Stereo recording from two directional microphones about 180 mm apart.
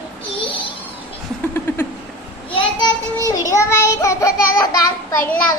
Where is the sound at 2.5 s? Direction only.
25° left (ahead or behind).